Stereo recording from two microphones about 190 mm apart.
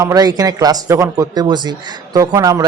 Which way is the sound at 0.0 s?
20° right (ahead or behind).